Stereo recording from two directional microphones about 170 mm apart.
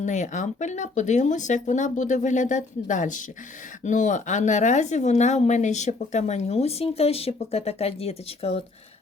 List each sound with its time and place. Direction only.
0.0 s speech: 45° left (ahead or behind)